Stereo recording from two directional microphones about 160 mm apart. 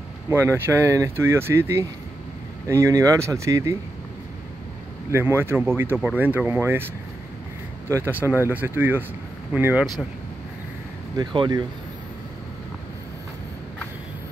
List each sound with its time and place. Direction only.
0.3 s speech: 15° right (ahead or behind)
5.1 s speech: 15° right (ahead or behind)
7.9 s speech: 15° right (ahead or behind)
11.1 s speech: 25° right (ahead or behind)